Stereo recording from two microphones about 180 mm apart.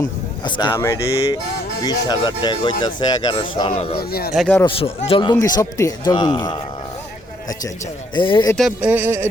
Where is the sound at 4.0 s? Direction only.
60° left (ahead or behind).